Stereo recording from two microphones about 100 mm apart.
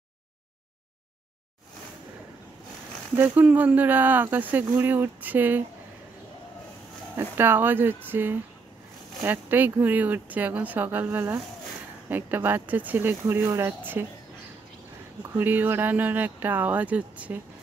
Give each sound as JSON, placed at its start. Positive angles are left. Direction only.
{"t": 3.2, "sound": "speech", "side_deg": -15}
{"t": 7.2, "sound": "speech", "side_deg": -20}
{"t": 15.3, "sound": "speech", "side_deg": -20}